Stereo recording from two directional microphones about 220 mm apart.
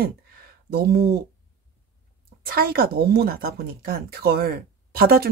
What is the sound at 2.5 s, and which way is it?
Speech, 45° right (ahead or behind).